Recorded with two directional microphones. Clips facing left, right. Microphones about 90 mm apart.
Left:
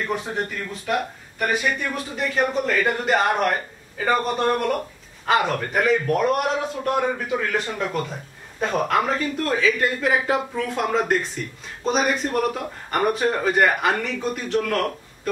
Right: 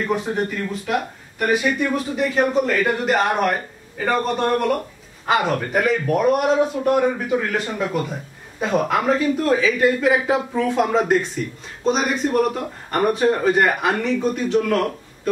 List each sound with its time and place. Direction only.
0.3 s speech: centre (ahead or behind)